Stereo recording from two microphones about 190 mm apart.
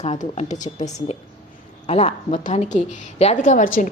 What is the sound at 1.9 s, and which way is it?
A woman's voice, 35° left (ahead or behind).